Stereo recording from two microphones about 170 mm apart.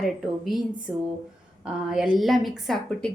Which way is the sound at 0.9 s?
5° right (ahead or behind).